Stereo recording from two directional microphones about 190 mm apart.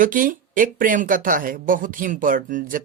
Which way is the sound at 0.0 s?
45° right (ahead or behind).